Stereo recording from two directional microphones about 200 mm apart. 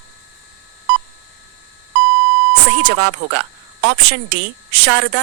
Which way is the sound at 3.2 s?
50° right (ahead or behind).